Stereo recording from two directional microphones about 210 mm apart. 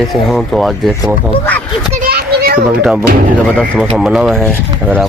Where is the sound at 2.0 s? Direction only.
45° right (ahead or behind).